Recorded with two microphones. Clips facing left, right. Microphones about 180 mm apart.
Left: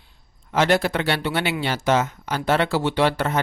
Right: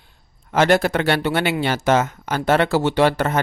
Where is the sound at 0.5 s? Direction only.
50° right (ahead or behind).